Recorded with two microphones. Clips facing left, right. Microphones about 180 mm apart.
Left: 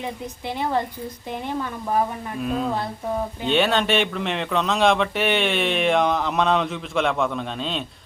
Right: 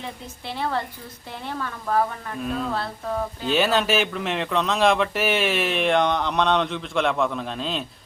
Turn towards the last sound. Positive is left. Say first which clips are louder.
# left 1 dB
turn(degrees=0)  # may be behind; listen again after turning